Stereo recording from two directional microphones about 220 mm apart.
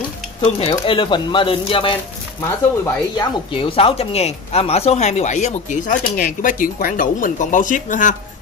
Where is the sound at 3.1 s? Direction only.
25° left (ahead or behind).